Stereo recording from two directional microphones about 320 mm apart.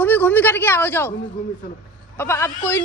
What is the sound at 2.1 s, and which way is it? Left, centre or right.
Speech, centre.